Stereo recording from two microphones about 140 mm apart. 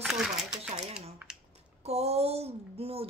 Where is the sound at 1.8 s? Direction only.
50° right (ahead or behind).